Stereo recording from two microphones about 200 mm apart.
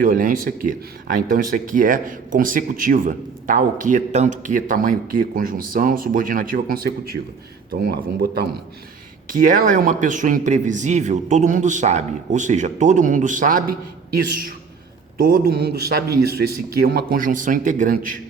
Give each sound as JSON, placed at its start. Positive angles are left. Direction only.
{"t": 0.0, "sound": "a man's voice", "side_deg": -45}